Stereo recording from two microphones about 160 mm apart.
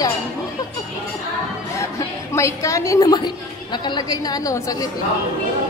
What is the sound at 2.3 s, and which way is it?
A woman's voice, 20° left (ahead or behind).